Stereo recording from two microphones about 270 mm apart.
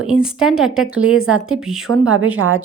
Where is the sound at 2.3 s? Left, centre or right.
Right.